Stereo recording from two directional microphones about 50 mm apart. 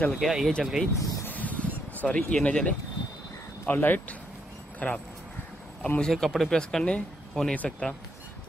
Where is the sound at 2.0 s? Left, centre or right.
Left.